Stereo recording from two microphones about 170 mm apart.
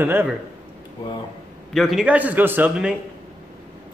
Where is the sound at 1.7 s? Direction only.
Centre (ahead or behind).